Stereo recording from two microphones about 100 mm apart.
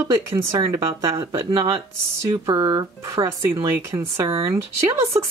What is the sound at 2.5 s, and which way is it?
Speech, 45° right (ahead or behind).